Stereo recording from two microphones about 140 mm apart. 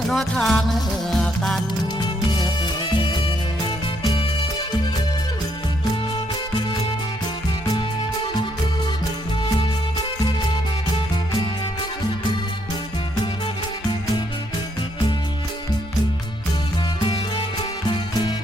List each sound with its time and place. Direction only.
0.1 s music: centre (ahead or behind)
17.8 s music: 35° left (ahead or behind)